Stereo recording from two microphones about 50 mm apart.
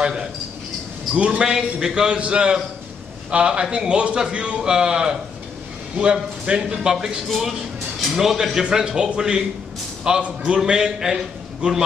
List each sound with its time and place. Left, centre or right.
0.0 s a man's voice: centre
1.1 s a man's voice: right
6.4 s a man's voice: centre
7.2 s a man's voice: centre; by 11.8 s right